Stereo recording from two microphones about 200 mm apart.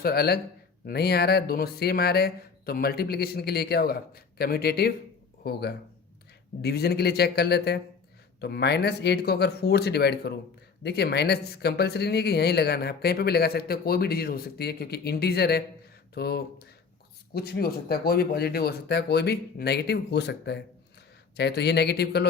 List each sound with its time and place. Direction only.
0.0 s speech: 50° left (ahead or behind)